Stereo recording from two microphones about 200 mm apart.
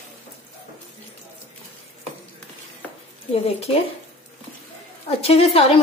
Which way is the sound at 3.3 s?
30° left (ahead or behind).